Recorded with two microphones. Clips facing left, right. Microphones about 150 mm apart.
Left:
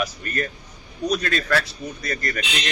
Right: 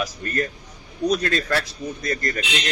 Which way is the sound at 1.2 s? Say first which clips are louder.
Even; 30° right (ahead or behind).